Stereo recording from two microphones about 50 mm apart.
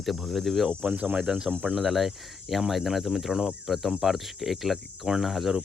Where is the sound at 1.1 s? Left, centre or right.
Centre.